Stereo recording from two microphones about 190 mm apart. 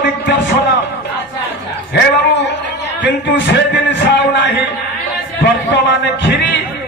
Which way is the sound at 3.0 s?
65° left (ahead or behind).